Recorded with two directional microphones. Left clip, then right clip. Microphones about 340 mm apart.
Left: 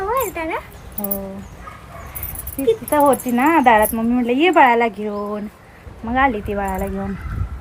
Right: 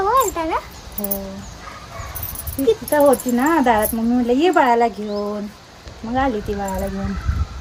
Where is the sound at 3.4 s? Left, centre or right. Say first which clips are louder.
Left 3 dB; centre.